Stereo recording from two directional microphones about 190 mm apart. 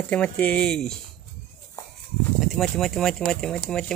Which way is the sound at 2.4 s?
Centre (ahead or behind).